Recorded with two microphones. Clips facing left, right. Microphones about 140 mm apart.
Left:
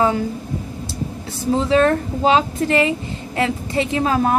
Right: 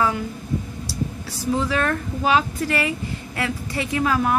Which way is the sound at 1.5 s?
25° left (ahead or behind).